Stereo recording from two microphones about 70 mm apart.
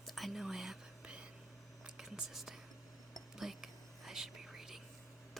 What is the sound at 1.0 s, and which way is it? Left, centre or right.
Whispering, centre.